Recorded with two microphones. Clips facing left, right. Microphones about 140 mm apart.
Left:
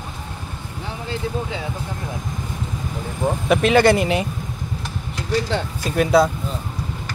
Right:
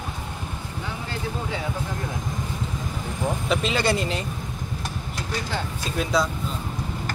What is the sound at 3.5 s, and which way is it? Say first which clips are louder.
Speech: left 10 dB; 60° left (ahead or behind).